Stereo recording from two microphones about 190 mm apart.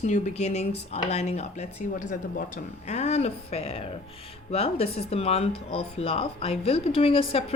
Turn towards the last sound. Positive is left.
turn(degrees=30)  # may be behind; listen again after turning